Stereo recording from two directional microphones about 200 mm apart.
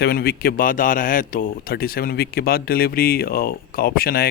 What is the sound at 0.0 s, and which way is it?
Speech, 50° left (ahead or behind).